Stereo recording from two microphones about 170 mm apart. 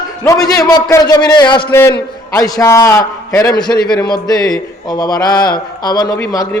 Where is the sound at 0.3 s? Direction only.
20° left (ahead or behind).